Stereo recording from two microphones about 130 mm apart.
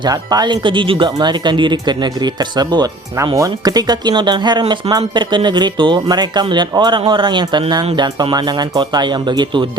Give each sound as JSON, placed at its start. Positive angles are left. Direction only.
{"t": 0.0, "sound": "speech", "side_deg": -30}